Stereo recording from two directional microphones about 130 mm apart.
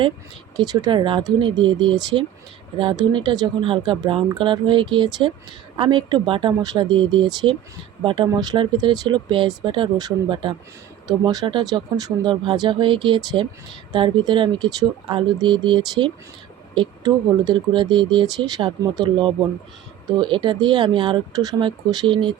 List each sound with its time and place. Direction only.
0.5 s speech: 30° right (ahead or behind)